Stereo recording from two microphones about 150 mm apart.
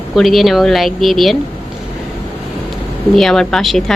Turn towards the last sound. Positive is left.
turn(degrees=0)  # may be behind; listen again after turning